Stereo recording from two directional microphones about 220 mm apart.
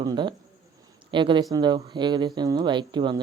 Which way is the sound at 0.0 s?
20° right (ahead or behind).